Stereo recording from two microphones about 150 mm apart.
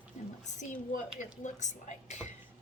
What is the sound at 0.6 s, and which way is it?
A woman's voice, 55° left (ahead or behind).